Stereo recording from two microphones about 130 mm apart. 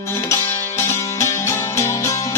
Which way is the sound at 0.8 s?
20° left (ahead or behind).